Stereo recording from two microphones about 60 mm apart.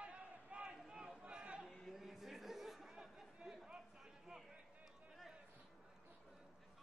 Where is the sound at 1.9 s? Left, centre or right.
Centre.